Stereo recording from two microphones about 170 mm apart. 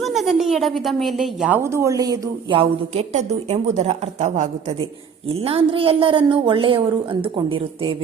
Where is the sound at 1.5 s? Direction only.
15° right (ahead or behind).